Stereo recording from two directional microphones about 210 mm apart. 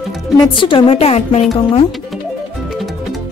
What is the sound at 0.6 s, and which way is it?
A woman's voice, 25° left (ahead or behind).